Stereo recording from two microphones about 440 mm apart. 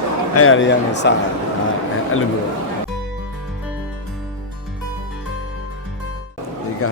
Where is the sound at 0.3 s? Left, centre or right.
Left.